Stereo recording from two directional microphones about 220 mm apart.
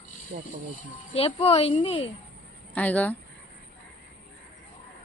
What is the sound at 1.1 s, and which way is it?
Speech, 25° left (ahead or behind).